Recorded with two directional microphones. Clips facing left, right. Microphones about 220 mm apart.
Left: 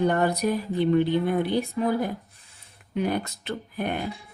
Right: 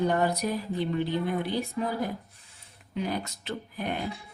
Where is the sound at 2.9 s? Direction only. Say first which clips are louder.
Left 5 dB; 60° left (ahead or behind).